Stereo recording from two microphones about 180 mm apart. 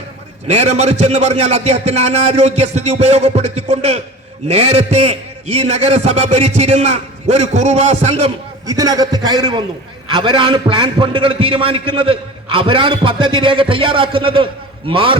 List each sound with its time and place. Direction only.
0.4 s a man's voice: 40° right (ahead or behind)
8.6 s a man's voice: 20° right (ahead or behind)